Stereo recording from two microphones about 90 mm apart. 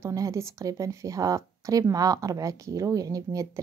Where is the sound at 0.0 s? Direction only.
35° right (ahead or behind).